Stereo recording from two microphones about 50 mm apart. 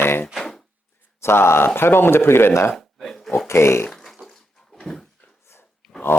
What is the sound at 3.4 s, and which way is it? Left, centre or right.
Speech, left.